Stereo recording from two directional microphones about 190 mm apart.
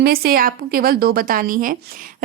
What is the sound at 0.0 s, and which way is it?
A woman's voice, 55° right (ahead or behind).